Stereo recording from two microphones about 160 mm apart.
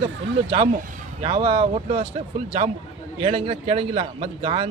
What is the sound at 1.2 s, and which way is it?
Speech, 35° right (ahead or behind).